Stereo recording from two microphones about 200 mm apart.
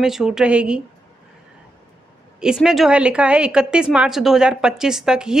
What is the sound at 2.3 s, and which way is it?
A woman's voice, 5° right (ahead or behind).